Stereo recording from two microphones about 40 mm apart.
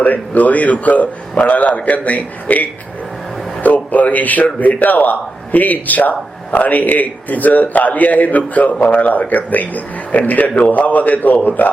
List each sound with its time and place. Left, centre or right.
0.0 s a man's voice: left